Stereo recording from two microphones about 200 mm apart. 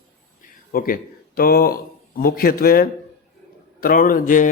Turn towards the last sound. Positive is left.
turn(degrees=45)  # may be behind; listen again after turning